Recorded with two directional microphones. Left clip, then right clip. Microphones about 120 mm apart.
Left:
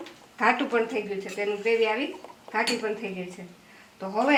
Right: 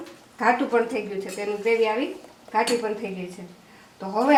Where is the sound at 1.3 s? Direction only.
5° left (ahead or behind).